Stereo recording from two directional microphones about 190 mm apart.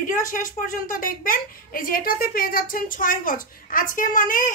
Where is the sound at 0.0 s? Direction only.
45° left (ahead or behind).